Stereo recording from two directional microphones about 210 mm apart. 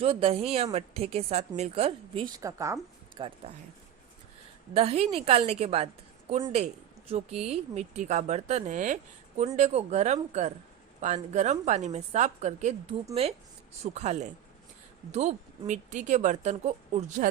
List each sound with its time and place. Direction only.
0.0 s a woman's voice: 30° right (ahead or behind)
2.4 s speech: 15° right (ahead or behind)
4.7 s a woman's voice: 30° right (ahead or behind)